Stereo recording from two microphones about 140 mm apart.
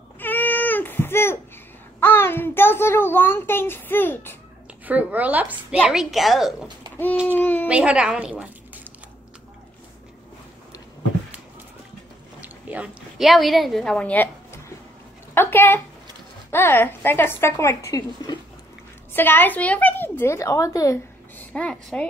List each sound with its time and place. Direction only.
0.2 s baby cry: 15° left (ahead or behind)
2.0 s a child's voice: 15° left (ahead or behind)
4.8 s a woman's voice: 10° right (ahead or behind)
7.2 s a child's voice: 10° left (ahead or behind)
7.6 s a woman's voice: 10° right (ahead or behind)
12.4 s a woman's voice: 10° right (ahead or behind); by 18.4 s 30° left (ahead or behind)
19.1 s a woman's voice: 15° left (ahead or behind)
21.5 s a child's voice: 5° left (ahead or behind)